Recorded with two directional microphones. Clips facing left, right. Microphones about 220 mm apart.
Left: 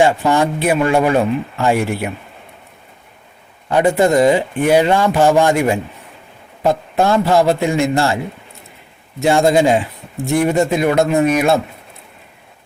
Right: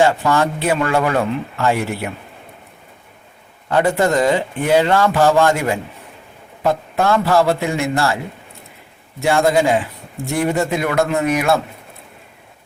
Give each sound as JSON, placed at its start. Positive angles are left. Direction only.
{"t": 0.0, "sound": "speech", "side_deg": 20}
{"t": 3.7, "sound": "speech", "side_deg": 15}
{"t": 9.2, "sound": "a man's voice", "side_deg": 15}